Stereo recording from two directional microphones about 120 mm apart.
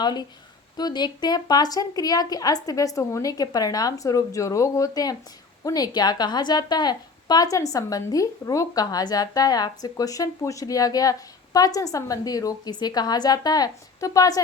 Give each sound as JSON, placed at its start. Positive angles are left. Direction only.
{"t": 0.0, "sound": "a woman's voice", "side_deg": 35}